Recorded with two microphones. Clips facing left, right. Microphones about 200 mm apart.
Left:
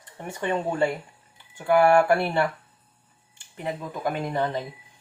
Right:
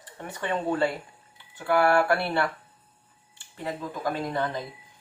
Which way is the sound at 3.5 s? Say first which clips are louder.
Left 1 dB; 20° left (ahead or behind).